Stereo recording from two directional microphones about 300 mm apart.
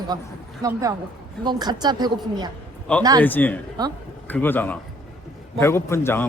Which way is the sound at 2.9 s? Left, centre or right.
Centre.